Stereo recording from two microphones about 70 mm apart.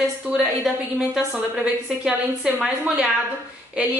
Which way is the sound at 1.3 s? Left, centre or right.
Centre.